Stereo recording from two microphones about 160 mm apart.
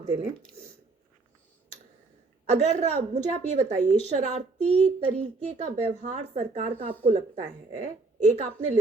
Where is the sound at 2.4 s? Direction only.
45° right (ahead or behind).